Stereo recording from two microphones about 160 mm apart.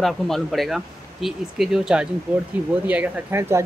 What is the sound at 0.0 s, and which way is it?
Speech, centre (ahead or behind).